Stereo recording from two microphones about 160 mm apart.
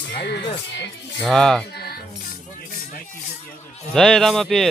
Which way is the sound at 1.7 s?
80° left.